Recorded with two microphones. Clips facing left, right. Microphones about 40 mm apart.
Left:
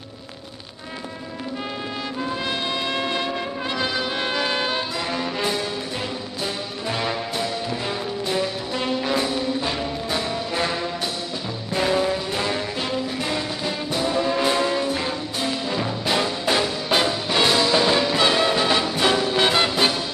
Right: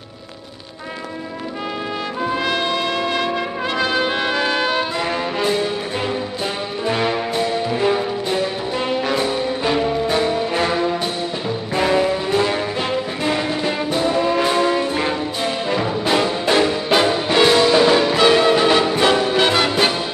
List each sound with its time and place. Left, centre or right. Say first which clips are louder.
2.2 s music: right 7 dB; right
3.7 s brass instrument: right 6 dB; right
6.4 s brass instrument: right 3 dB; right
11.7 s music: right 3 dB; right
13.9 s brass instrument: right 3 dB; right
14.8 s music: right 4 dB; right
15.8 s music: right 5 dB; centre